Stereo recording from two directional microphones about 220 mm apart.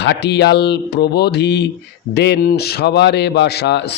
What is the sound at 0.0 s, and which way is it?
Speech, 50° left (ahead or behind).